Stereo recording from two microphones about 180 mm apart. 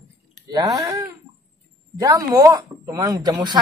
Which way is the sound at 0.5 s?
20° right (ahead or behind).